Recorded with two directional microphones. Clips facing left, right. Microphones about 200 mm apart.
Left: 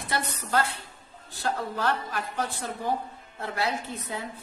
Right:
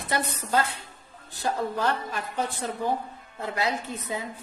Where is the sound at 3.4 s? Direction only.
15° right (ahead or behind).